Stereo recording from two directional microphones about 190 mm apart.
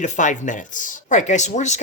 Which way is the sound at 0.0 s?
40° left (ahead or behind).